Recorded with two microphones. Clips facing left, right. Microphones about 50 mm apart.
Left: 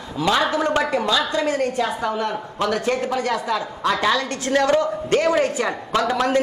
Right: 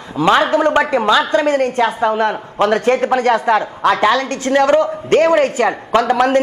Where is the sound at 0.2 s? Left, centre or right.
Right.